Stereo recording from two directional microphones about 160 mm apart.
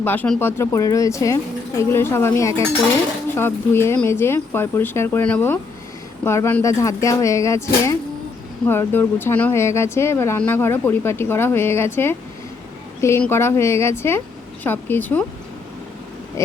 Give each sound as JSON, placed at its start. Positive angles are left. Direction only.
{"t": 0.0, "sound": "speech", "side_deg": 10}